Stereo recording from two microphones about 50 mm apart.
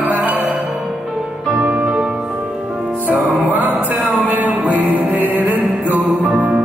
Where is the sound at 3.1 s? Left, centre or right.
Centre.